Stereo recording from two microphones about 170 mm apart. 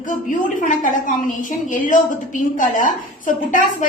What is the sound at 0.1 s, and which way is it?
A woman's voice, 50° left (ahead or behind).